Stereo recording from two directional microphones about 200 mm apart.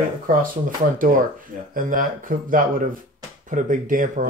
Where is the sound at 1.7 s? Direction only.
45° right (ahead or behind).